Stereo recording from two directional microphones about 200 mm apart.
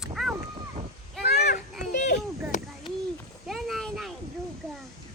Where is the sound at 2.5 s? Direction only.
40° left (ahead or behind).